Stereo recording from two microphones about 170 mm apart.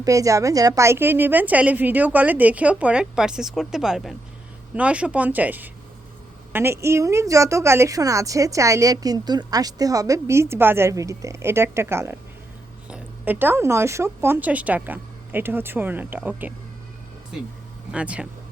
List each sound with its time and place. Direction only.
0.0 s a woman's voice: 20° right (ahead or behind)
17.9 s a woman's voice: 5° right (ahead or behind)